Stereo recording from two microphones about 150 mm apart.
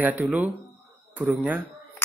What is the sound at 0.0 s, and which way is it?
Speech, 10° right (ahead or behind).